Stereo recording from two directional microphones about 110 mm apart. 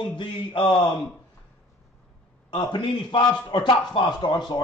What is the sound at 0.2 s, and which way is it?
Speech, 50° left (ahead or behind).